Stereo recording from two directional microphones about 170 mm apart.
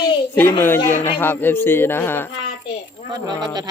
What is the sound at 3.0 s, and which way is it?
Speech, 25° right (ahead or behind).